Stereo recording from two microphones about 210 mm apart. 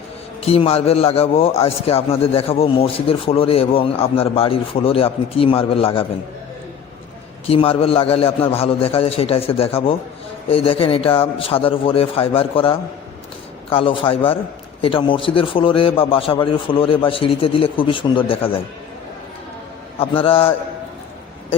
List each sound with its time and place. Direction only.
0.4 s a man's voice: 30° left (ahead or behind)
7.4 s a man's voice: 25° left (ahead or behind)
20.0 s a man's voice: 25° left (ahead or behind)